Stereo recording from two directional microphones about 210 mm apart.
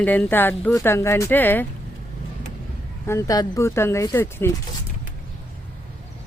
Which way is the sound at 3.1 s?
15° left (ahead or behind).